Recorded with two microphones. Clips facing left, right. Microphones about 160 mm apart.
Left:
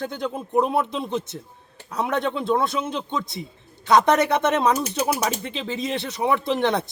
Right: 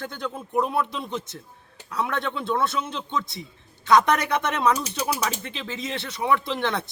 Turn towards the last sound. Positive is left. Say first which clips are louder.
# left 5 dB
turn(degrees=20)  # may be behind; listen again after turning